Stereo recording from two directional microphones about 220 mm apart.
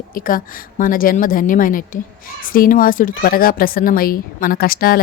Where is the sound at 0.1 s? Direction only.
40° left (ahead or behind).